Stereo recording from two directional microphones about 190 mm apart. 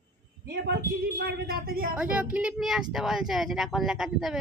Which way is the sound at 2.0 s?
5° right (ahead or behind).